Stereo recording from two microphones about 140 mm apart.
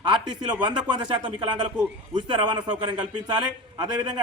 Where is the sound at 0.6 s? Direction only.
35° right (ahead or behind).